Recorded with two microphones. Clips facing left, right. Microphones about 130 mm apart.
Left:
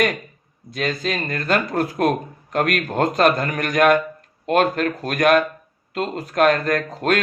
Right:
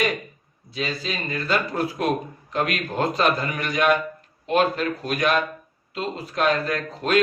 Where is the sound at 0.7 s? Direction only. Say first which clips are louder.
Left 5 dB; 55° left (ahead or behind).